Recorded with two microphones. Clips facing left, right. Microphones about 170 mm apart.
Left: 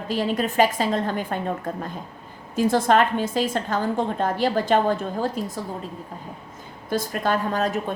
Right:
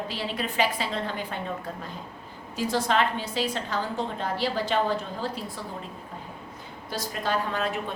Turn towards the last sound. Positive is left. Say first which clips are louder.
# left 5 dB
turn(degrees=40)  # may be behind; listen again after turning